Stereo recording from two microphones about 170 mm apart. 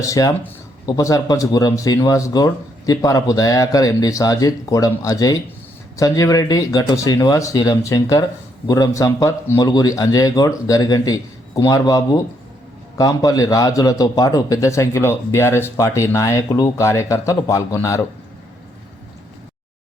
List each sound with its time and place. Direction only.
0.0 s speech: 20° left (ahead or behind)